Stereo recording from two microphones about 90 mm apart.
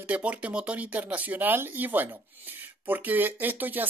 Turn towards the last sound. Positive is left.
turn(degrees=-20)  # may be behind; listen again after turning